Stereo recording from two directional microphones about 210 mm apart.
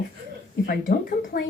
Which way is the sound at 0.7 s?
40° left (ahead or behind).